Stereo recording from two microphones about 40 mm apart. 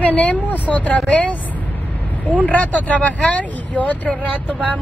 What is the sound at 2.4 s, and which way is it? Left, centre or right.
Speech, left.